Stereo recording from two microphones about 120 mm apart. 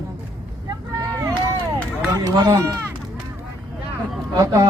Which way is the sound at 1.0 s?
30° right (ahead or behind).